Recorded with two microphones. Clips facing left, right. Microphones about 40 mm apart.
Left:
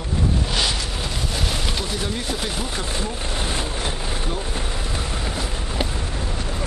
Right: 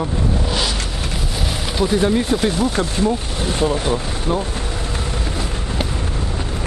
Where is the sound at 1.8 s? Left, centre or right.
Centre.